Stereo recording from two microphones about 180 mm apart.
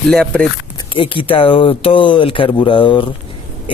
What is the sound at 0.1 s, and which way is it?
Speech, 5° left (ahead or behind).